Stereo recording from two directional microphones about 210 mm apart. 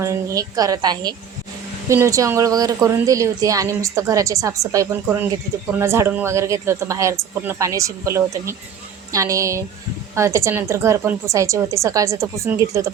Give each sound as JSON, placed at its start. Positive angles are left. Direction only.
{"t": 0.0, "sound": "speech", "side_deg": -15}